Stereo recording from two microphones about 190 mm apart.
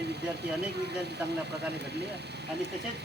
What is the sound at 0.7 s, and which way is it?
Speech, 60° right (ahead or behind).